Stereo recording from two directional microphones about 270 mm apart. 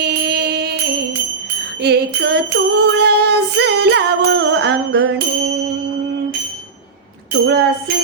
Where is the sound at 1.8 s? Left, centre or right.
Right.